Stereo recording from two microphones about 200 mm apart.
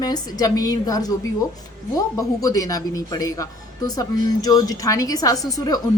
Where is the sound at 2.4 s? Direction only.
15° left (ahead or behind).